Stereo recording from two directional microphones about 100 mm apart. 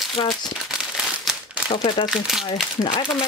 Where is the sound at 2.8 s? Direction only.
55° left (ahead or behind).